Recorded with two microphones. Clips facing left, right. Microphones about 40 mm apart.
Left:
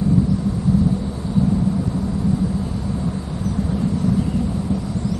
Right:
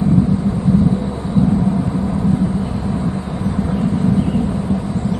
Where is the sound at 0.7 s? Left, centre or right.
Right.